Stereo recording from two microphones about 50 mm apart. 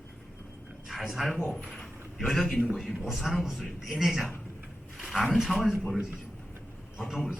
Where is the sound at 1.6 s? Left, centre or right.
Centre.